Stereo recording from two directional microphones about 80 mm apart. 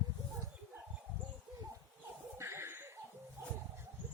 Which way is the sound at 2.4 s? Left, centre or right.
Right.